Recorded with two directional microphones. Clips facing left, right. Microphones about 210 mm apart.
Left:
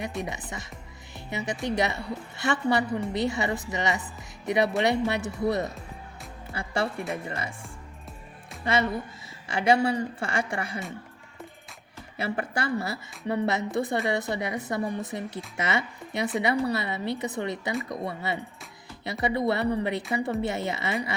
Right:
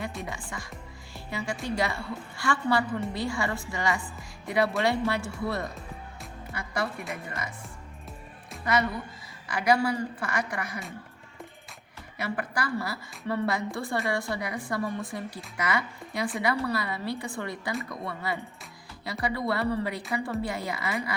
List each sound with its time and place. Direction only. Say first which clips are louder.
0.2 s a woman's voice: left 3 dB; 20° left (ahead or behind)
1.1 s music: left 2 dB; 20° left (ahead or behind)
1.6 s a woman's voice: left 3 dB; 20° left (ahead or behind)
6.5 s music: left 3 dB; 30° left (ahead or behind)
7.1 s speech: left 4 dB; 30° left (ahead or behind)
8.6 s a woman's voice: left 1 dB; 25° left (ahead or behind)
12.1 s a woman's voice: left 2 dB; 25° left (ahead or behind)